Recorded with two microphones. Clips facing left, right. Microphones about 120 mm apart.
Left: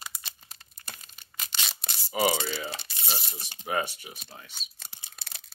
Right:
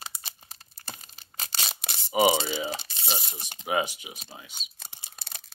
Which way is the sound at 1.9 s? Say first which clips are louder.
Right 4 dB; 20° right (ahead or behind).